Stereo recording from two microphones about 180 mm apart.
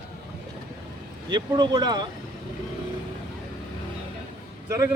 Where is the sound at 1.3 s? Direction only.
25° right (ahead or behind).